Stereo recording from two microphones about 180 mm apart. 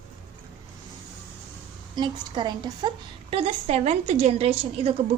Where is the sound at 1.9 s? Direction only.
25° right (ahead or behind).